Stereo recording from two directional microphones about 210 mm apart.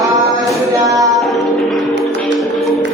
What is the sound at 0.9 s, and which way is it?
Music, 15° right (ahead or behind).